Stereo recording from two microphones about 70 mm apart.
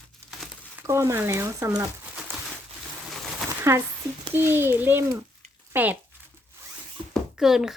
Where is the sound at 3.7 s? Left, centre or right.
Right.